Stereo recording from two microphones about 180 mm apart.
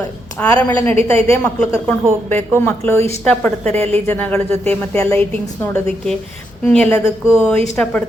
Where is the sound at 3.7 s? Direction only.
35° right (ahead or behind).